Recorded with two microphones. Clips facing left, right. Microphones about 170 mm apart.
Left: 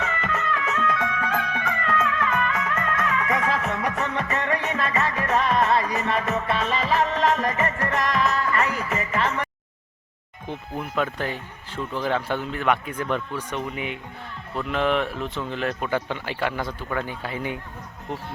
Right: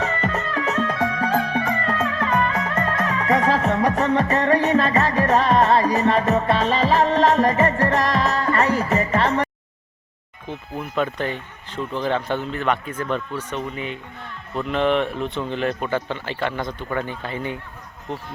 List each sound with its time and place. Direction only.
0.0 s music: 35° right (ahead or behind)
10.8 s a man's voice: 5° left (ahead or behind)